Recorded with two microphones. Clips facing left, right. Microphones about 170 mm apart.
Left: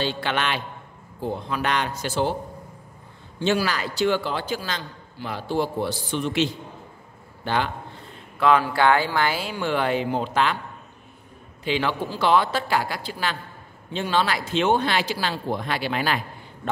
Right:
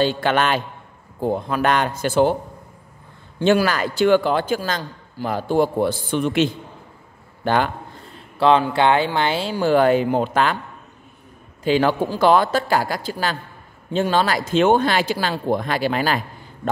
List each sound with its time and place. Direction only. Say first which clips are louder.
0.0 s a man's voice: right 7 dB; 45° right (ahead or behind)
3.3 s a man's voice: right 6 dB; 50° right (ahead or behind)
8.4 s speech: right 3 dB; 25° right (ahead or behind); by 10.6 s 45° right (ahead or behind)
11.6 s a man's voice: right 7 dB; 45° right (ahead or behind)